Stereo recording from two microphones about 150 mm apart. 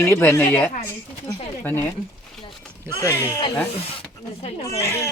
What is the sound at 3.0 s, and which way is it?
Speech, 20° left (ahead or behind).